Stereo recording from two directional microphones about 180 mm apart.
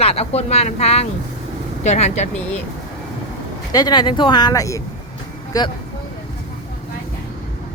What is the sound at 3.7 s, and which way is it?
Speech, 20° left (ahead or behind).